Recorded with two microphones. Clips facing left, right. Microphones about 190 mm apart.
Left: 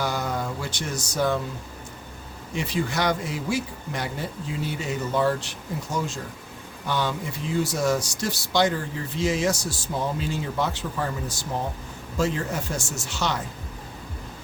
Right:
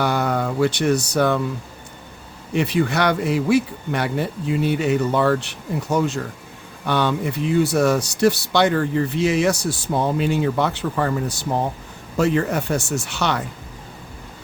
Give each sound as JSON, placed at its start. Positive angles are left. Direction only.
{"t": 0.0, "sound": "speech", "side_deg": -65}
{"t": 2.5, "sound": "speech", "side_deg": -65}